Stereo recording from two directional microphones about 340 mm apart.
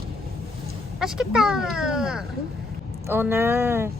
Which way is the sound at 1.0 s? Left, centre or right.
Centre.